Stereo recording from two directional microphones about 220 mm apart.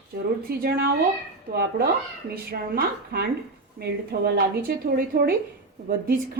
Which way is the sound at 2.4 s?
45° right (ahead or behind).